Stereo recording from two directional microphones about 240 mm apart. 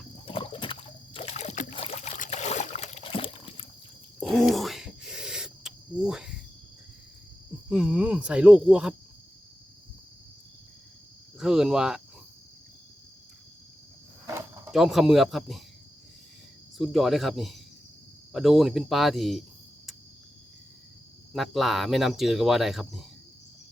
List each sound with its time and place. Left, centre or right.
0.3 s boat: left
4.2 s owl: centre
7.7 s speech: centre
11.3 s speech: centre
14.3 s speech: centre
16.7 s speech: centre
21.3 s speech: centre